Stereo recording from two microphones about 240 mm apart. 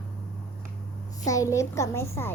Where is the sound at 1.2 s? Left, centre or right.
Centre.